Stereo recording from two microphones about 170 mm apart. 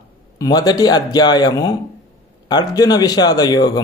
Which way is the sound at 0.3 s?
20° left (ahead or behind).